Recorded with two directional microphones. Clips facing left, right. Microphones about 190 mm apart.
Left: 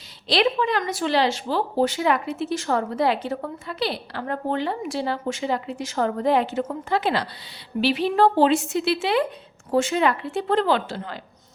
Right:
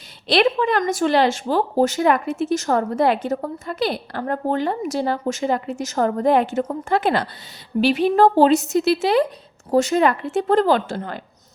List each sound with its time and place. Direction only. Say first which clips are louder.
0.3 s a woman's voice: right 3 dB; 55° right (ahead or behind)